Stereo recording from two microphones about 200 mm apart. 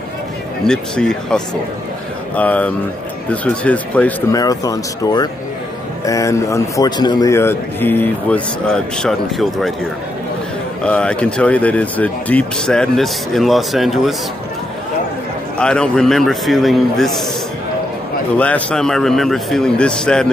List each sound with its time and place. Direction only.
0.7 s a man's voice: 5° left (ahead or behind)
4.4 s a man's voice: 20° left (ahead or behind); by 9.8 s centre (ahead or behind)
10.9 s speech: 5° left (ahead or behind)
15.6 s speech: 5° left (ahead or behind)
18.4 s speech: 5° left (ahead or behind)